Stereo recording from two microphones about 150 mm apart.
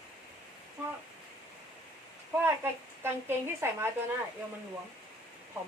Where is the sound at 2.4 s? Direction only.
15° right (ahead or behind).